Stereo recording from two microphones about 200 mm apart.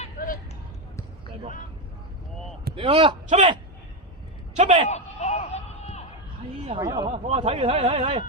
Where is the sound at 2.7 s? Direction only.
25° right (ahead or behind).